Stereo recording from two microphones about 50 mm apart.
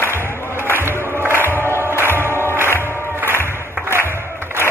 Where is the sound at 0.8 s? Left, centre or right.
Right.